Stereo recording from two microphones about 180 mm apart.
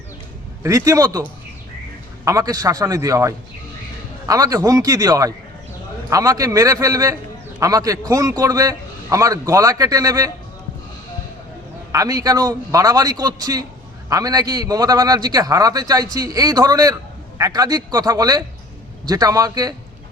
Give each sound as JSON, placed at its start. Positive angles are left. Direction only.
{"t": 0.6, "sound": "a man's voice", "side_deg": -20}
{"t": 2.2, "sound": "a man's voice", "side_deg": -20}
{"t": 11.9, "sound": "a man's voice", "side_deg": -20}